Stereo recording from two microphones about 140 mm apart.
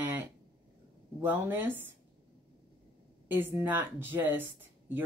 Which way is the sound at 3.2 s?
15° right (ahead or behind).